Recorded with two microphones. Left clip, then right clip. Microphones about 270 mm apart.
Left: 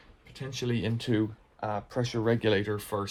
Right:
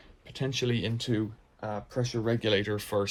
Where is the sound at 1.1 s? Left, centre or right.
Left; by 3.0 s centre.